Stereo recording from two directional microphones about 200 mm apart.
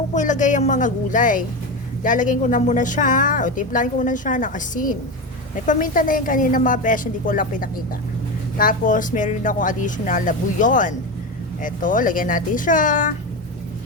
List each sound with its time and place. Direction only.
0.1 s speech: 40° left (ahead or behind)